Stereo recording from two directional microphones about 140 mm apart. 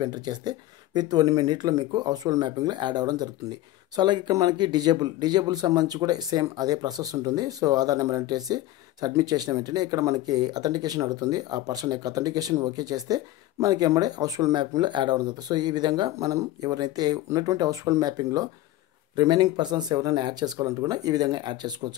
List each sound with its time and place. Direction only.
0.0 s speech: 30° right (ahead or behind)